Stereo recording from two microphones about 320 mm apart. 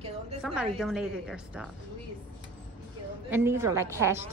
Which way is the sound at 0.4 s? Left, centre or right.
Centre.